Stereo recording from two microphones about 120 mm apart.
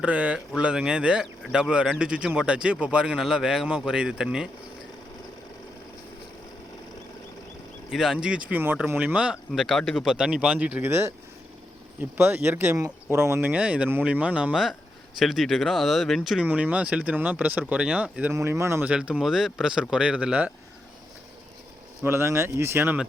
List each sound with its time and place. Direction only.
0.0 s speech: 10° right (ahead or behind)
7.9 s speech: 5° right (ahead or behind); by 11.1 s 20° right (ahead or behind)
12.1 s speech: 15° right (ahead or behind); by 16.5 s centre (ahead or behind)
16.5 s speech: 10° right (ahead or behind)
18.3 s speech: 25° right (ahead or behind)
18.9 s speech: 10° right (ahead or behind)
22.0 s speech: 20° right (ahead or behind)